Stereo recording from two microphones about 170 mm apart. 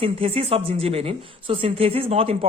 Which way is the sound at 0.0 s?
35° right (ahead or behind).